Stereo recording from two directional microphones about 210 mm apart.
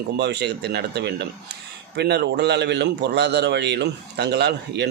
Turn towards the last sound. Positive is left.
turn(degrees=-50)  # may be behind; listen again after turning